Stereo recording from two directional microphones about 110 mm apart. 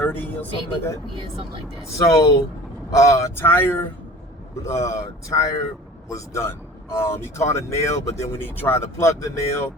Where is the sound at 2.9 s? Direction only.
30° left (ahead or behind).